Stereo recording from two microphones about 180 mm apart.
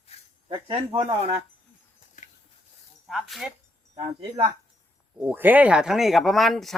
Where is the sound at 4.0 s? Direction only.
30° right (ahead or behind).